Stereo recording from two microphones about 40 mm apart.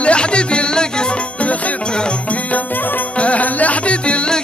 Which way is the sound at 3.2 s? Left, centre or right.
Left.